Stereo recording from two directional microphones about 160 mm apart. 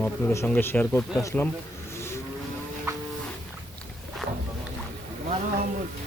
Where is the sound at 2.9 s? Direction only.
20° right (ahead or behind).